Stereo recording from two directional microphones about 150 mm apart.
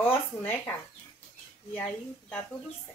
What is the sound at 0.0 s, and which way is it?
Speech, 15° left (ahead or behind).